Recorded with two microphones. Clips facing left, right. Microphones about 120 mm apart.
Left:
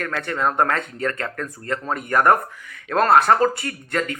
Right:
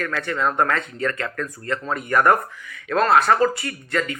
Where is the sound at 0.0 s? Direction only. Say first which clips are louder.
Even; 40° left (ahead or behind).